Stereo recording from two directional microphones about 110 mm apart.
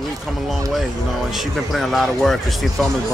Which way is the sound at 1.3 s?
Centre (ahead or behind).